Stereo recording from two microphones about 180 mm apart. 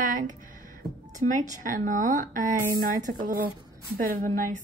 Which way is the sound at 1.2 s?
45° right (ahead or behind).